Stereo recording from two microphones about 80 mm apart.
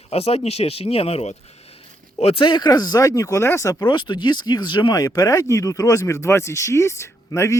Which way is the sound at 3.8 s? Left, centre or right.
Left.